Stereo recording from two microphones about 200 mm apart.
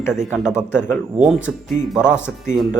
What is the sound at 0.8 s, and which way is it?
Speech, 5° right (ahead or behind).